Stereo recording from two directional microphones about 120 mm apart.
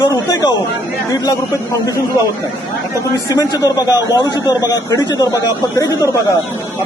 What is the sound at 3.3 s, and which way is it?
A man's voice, 30° left (ahead or behind).